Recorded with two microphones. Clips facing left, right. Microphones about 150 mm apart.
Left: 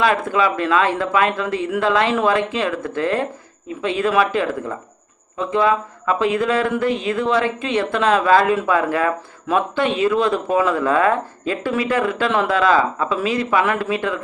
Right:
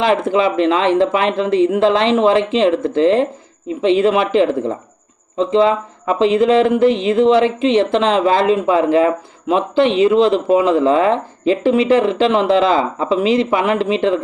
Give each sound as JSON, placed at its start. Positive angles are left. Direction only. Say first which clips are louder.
{"t": 0.0, "sound": "speech", "louder": "right 3 dB", "side_deg": -25}